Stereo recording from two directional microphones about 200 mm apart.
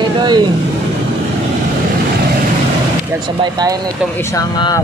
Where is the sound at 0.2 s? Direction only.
20° right (ahead or behind).